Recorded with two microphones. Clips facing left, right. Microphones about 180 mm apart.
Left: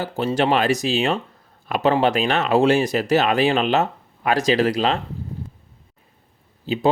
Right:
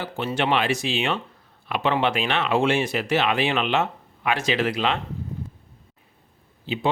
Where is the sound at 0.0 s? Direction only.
40° left (ahead or behind).